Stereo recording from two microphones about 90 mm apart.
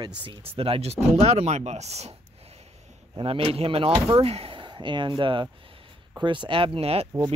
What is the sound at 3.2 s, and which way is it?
Speech, 90° right.